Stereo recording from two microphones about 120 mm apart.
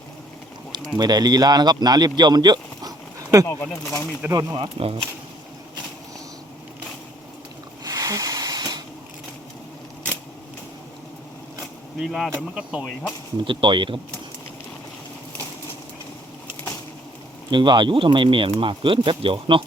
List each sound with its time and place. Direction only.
0.9 s speech: 35° right (ahead or behind)
3.4 s speech: 20° left (ahead or behind)
4.3 s speech: 30° right (ahead or behind)
4.6 s speech: 50° right (ahead or behind)
7.9 s a sound: 30° right (ahead or behind)
11.9 s speech: 5° right (ahead or behind)
13.3 s speech: 45° right (ahead or behind)
17.5 s speech: 40° right (ahead or behind)